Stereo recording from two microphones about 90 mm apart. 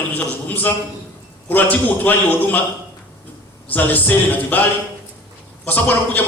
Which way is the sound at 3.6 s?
20° left (ahead or behind).